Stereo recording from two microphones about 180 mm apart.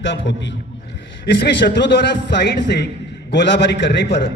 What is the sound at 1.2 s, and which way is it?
A man's voice, 75° left (ahead or behind).